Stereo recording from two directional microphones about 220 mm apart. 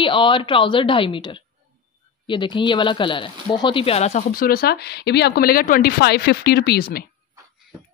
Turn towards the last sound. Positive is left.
turn(degrees=45)  # may be behind; listen again after turning